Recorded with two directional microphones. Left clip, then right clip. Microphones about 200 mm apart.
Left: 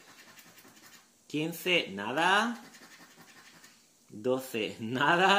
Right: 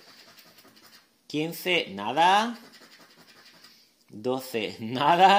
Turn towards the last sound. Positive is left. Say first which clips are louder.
# right 6 dB
turn(degrees=-30)  # may be behind; listen again after turning